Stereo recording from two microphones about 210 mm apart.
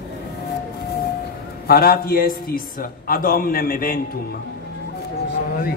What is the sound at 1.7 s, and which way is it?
A man's voice, 45° left (ahead or behind).